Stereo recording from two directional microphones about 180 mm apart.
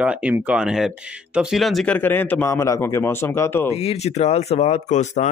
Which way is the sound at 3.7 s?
35° left (ahead or behind).